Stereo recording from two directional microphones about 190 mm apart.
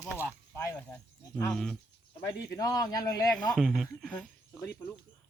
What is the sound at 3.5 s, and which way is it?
Speech, centre (ahead or behind).